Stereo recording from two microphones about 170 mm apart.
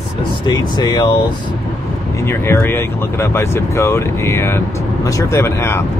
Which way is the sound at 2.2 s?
15° left (ahead or behind).